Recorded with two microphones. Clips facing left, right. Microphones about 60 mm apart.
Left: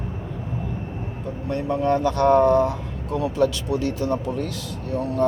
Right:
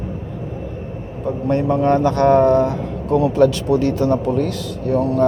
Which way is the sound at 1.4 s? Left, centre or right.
Right.